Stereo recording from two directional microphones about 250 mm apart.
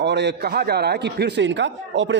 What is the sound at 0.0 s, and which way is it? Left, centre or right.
A man's voice, right.